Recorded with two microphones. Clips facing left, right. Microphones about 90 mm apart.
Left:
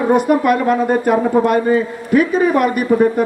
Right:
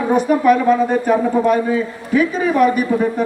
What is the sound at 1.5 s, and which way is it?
A man's voice, 55° left (ahead or behind).